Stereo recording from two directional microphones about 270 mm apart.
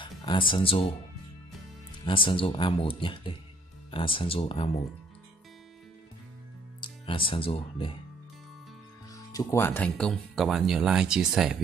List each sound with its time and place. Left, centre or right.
0.0 s speech: centre
2.0 s speech: centre
6.8 s speech: centre
9.1 s speech: centre